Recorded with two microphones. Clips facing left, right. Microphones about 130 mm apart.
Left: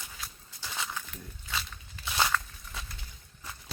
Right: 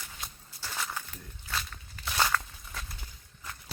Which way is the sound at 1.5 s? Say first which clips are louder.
Right 1 dB; 5° left (ahead or behind).